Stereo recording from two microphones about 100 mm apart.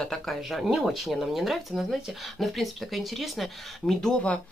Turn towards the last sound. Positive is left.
turn(degrees=0)  # may be behind; listen again after turning